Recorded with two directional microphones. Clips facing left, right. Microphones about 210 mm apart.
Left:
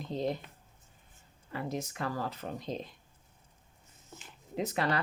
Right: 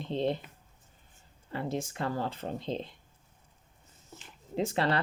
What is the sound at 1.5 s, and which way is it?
Speech, 30° right (ahead or behind).